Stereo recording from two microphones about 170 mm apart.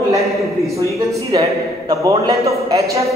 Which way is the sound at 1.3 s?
25° right (ahead or behind).